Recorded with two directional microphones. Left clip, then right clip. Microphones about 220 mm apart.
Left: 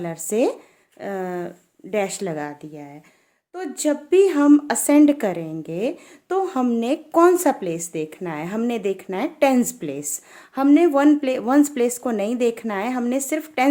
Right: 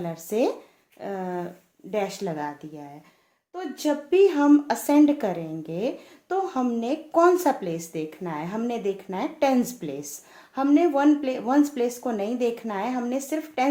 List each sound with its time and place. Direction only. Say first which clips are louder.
0.0 s speech: left 4 dB; 35° left (ahead or behind)